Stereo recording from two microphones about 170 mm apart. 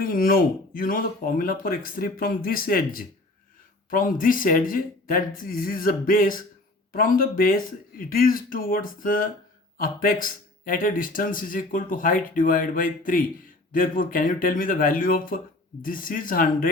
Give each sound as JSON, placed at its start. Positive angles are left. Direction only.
{"t": 0.0, "sound": "speech", "side_deg": 55}